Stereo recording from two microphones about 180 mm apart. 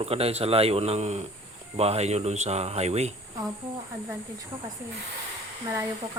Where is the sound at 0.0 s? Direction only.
35° right (ahead or behind).